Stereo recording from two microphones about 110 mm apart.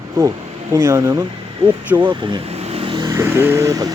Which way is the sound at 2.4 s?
70° right (ahead or behind).